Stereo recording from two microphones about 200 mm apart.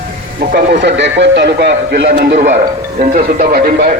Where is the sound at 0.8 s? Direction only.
60° right (ahead or behind).